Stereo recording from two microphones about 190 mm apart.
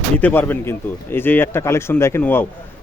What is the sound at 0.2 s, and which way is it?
Speech, 10° left (ahead or behind).